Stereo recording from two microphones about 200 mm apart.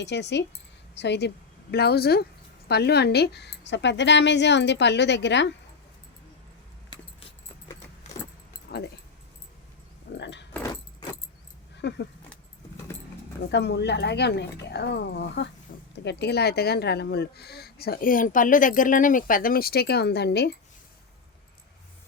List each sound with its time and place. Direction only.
0.0 s a woman's voice: 60° left (ahead or behind)
8.7 s dog: 50° left (ahead or behind)
10.2 s keys jangling: 60° left (ahead or behind)
11.8 s keys jangling: 60° left (ahead or behind)
13.5 s a woman's voice: 60° left (ahead or behind)
15.7 s a sound: 45° left (ahead or behind)
16.0 s speech: 55° left (ahead or behind)